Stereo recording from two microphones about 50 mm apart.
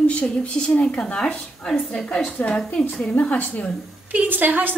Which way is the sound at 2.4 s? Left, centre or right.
Left.